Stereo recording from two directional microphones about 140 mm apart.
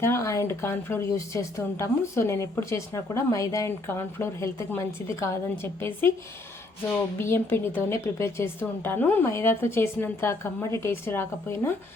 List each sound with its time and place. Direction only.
0.0 s speech: 20° left (ahead or behind)
7.2 s a woman's voice: 15° left (ahead or behind)